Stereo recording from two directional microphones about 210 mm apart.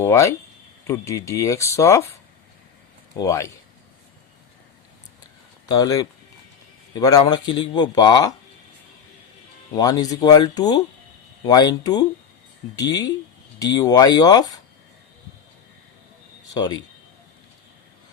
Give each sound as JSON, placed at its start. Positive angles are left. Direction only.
{"t": 0.0, "sound": "speech", "side_deg": 15}
{"t": 3.2, "sound": "speech", "side_deg": 15}
{"t": 5.6, "sound": "speech", "side_deg": 20}
{"t": 9.7, "sound": "speech", "side_deg": 20}
{"t": 16.6, "sound": "speech", "side_deg": 20}